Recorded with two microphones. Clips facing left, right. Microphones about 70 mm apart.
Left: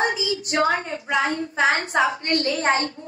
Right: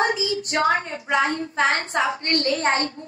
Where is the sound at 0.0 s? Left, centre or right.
Right.